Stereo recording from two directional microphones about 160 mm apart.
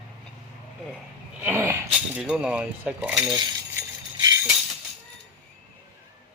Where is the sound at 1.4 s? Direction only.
15° right (ahead or behind).